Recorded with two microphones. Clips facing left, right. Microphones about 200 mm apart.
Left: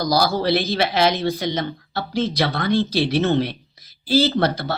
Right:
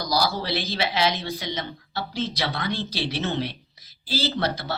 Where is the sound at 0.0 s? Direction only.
50° left (ahead or behind).